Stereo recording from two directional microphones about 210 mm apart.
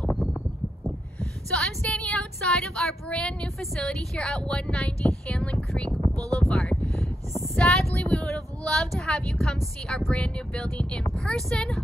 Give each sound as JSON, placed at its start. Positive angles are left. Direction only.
{"t": 1.2, "sound": "a woman's voice", "side_deg": 5}
{"t": 5.9, "sound": "a sound", "side_deg": -25}
{"t": 6.5, "sound": "a woman's voice", "side_deg": 5}